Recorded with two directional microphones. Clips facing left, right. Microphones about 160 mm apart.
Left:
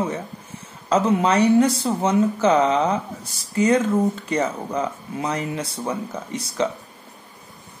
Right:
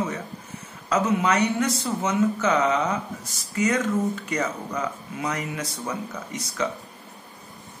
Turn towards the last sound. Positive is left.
turn(degrees=30)  # may be behind; listen again after turning